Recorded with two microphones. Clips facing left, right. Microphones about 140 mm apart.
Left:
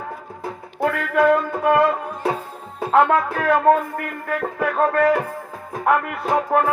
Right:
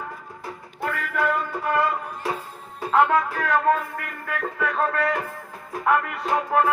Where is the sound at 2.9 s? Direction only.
55° left (ahead or behind).